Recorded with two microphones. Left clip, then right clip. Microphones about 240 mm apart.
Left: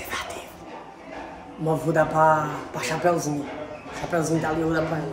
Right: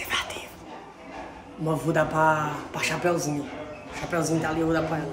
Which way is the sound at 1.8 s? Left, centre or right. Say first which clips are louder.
Left 3 dB; centre.